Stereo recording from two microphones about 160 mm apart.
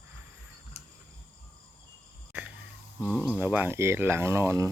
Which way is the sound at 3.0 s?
10° right (ahead or behind).